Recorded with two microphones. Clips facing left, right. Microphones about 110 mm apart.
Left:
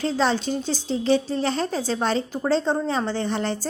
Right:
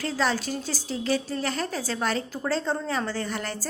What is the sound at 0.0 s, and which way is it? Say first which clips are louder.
A woman's voice: left 4 dB; 25° left (ahead or behind).